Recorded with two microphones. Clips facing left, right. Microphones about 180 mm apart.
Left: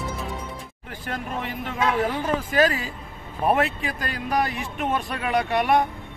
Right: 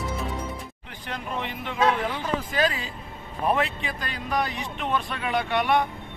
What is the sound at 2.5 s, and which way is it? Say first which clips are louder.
Music: left 6 dB; 45° left (ahead or behind).